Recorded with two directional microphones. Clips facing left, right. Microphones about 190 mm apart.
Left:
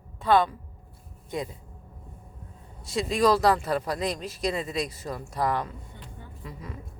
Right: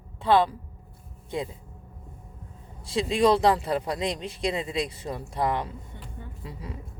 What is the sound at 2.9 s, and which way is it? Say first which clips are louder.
Speech: right 1 dB; 30° right (ahead or behind).